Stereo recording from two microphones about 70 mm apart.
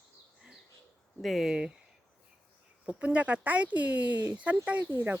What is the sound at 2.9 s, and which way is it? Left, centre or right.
Speech, centre.